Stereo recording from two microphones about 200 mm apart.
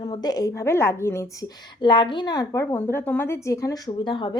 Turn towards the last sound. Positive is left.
turn(degrees=25)  # may be behind; listen again after turning